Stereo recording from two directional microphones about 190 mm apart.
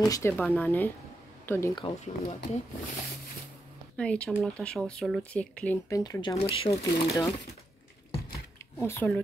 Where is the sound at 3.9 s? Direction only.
5° left (ahead or behind).